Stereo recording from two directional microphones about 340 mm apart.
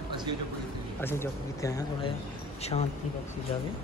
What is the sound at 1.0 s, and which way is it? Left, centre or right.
A man's voice, centre.